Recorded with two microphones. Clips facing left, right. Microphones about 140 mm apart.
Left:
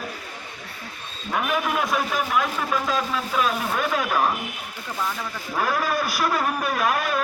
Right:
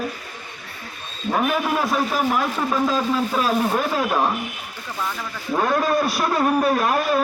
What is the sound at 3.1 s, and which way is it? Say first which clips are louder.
A man's voice: right 4 dB; 30° right (ahead or behind).